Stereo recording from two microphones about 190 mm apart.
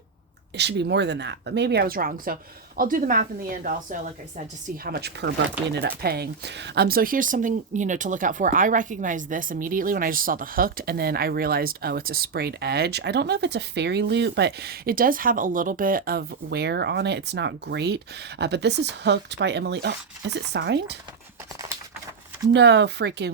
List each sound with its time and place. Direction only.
0.5 s speech: 65° right (ahead or behind); by 4.1 s 45° right (ahead or behind)
4.8 s speech: 55° right (ahead or behind)
22.5 s speech: 65° right (ahead or behind)